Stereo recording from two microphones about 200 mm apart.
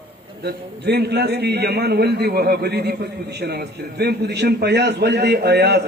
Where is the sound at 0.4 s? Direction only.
55° right (ahead or behind).